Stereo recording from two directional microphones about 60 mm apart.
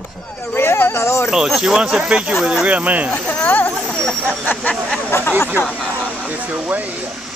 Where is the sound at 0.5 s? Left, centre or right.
Left.